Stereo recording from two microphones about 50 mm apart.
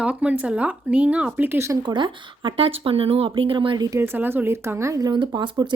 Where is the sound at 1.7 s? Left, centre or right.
Right.